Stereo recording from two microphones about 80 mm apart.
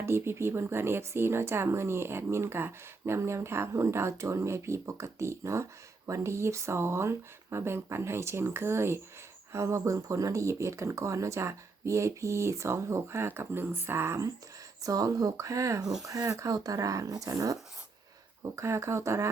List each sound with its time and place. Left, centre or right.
0.0 s speech: right
14.8 s speech: right
18.5 s speech: right